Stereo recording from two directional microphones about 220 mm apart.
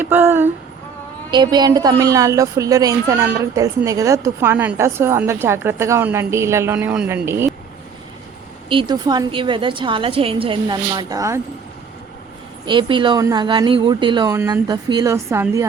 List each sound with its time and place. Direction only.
0.0 s a woman's voice: 10° right (ahead or behind)
8.7 s a woman's voice: 20° right (ahead or behind)
12.6 s a woman's voice: 20° right (ahead or behind)